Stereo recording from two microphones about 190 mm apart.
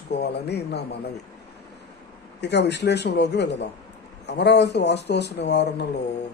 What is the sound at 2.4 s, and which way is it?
Speech, 65° left (ahead or behind).